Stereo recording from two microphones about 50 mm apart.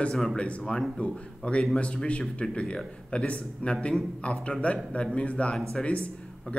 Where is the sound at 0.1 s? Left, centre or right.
Centre.